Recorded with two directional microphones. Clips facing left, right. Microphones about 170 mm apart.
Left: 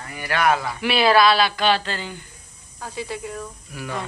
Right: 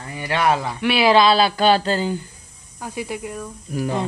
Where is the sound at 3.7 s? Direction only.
40° right (ahead or behind).